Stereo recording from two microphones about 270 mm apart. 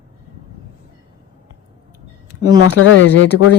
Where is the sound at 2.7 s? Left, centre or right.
Left.